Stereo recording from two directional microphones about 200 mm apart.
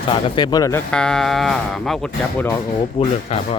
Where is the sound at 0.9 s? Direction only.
5° left (ahead or behind).